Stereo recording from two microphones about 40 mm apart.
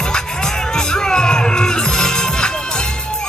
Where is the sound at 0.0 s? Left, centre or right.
Centre.